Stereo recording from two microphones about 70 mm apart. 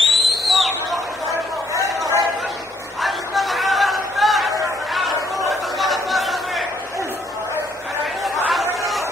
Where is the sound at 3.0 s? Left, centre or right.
Centre.